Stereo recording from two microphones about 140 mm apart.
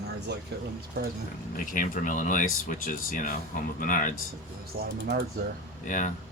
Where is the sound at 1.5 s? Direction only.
70° left (ahead or behind).